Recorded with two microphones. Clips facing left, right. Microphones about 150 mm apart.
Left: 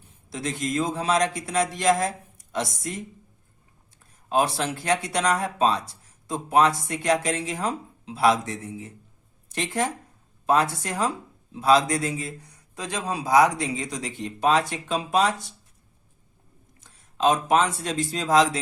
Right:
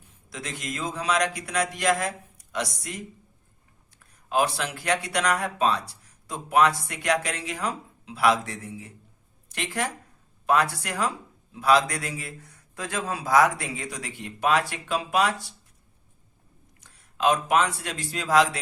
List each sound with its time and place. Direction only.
0.3 s a man's voice: 30° left (ahead or behind)
4.3 s a man's voice: 30° left (ahead or behind)
16.8 s speech: 25° left (ahead or behind)